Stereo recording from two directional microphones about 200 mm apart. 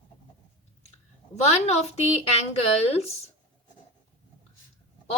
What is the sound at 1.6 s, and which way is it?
A woman's voice, 35° left (ahead or behind).